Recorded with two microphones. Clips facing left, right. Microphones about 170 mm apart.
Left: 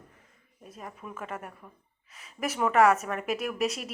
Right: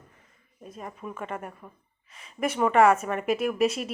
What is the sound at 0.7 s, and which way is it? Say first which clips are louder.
A woman's voice: right 4 dB; centre (ahead or behind).